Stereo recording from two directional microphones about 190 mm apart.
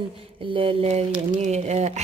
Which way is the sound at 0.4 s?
30° right (ahead or behind).